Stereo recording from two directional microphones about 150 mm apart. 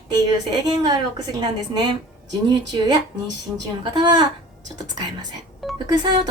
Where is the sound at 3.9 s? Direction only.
30° right (ahead or behind).